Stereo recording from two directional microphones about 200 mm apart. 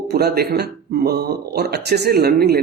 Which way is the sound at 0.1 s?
55° right (ahead or behind).